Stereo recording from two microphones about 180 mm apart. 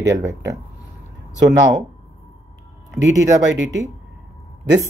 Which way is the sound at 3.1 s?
90° right.